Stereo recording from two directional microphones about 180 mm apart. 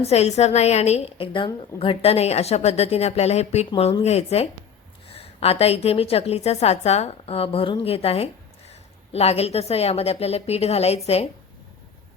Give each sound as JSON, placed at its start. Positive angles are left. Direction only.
{"t": 0.0, "sound": "a woman's voice", "side_deg": 35}